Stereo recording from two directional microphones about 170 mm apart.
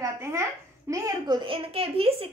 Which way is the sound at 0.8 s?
20° right (ahead or behind).